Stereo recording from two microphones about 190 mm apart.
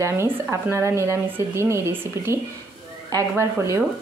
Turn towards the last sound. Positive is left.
turn(degrees=-15)  # may be behind; listen again after turning